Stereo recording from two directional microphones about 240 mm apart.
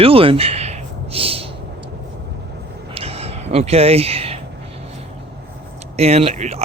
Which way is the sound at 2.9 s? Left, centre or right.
Right.